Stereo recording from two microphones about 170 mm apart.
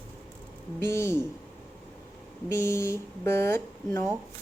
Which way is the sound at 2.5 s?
15° left (ahead or behind).